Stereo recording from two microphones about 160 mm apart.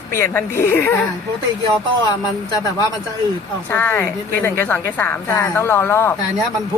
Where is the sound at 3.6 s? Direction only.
15° left (ahead or behind).